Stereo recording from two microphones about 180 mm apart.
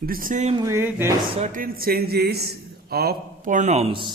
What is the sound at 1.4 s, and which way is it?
A man's voice, 50° right (ahead or behind).